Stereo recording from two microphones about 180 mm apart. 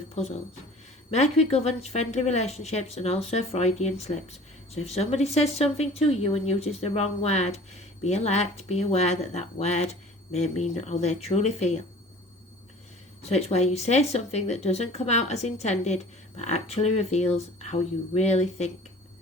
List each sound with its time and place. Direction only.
1.1 s a woman's voice: 35° left (ahead or behind)
13.2 s a woman's voice: 35° left (ahead or behind)